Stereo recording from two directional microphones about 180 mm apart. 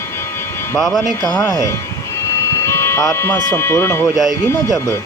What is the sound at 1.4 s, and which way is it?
Speech, 20° left (ahead or behind).